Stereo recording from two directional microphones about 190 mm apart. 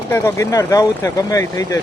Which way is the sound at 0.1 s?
15° left (ahead or behind).